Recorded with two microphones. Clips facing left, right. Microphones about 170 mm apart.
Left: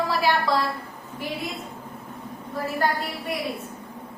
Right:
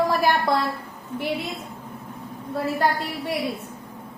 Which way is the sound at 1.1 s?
70° right (ahead or behind).